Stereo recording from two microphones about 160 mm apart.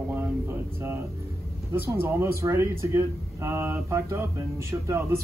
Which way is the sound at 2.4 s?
15° right (ahead or behind).